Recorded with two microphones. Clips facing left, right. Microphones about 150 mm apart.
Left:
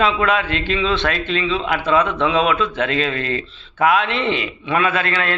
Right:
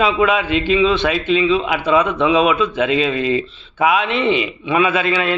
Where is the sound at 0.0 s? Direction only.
5° right (ahead or behind).